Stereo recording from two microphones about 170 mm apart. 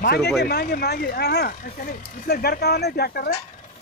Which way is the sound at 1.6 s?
65° left (ahead or behind).